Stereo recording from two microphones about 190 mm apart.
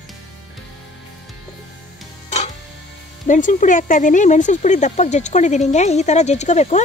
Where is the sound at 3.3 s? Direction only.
40° left (ahead or behind).